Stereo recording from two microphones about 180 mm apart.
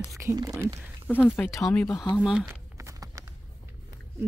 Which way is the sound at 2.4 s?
20° right (ahead or behind).